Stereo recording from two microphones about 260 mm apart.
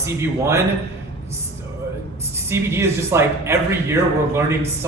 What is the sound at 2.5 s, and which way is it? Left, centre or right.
Speech, centre.